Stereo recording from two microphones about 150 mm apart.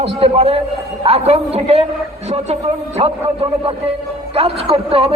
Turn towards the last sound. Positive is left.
turn(degrees=-40)  # may be behind; listen again after turning